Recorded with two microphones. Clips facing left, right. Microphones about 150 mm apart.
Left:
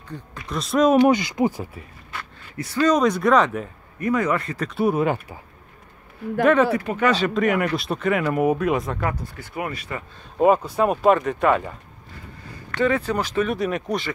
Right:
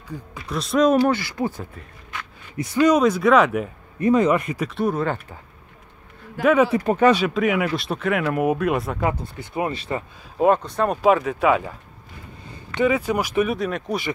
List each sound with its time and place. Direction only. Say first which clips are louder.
0.1 s speech: right 1 dB; 5° right (ahead or behind)
1.0 s speech: left 3 dB; 15° left (ahead or behind)
2.5 s speech: right 2 dB; 20° right (ahead or behind)
3.0 s speech: right 2 dB; centre (ahead or behind)
4.0 s speech: right 4 dB; 25° right (ahead or behind)
4.6 s speech: left 5 dB; 5° left (ahead or behind)
6.4 s speech: even; 5° right (ahead or behind)
6.8 s speech: right 5 dB; 40° right (ahead or behind)
7.2 s speech: even; 5° right (ahead or behind)
9.0 s speech: right 3 dB; 20° right (ahead or behind)
10.3 s speech: left 1 dB; 5° left (ahead or behind)
12.4 s speech: right 1 dB; 15° right (ahead or behind)
13.6 s speech: left 1 dB; centre (ahead or behind)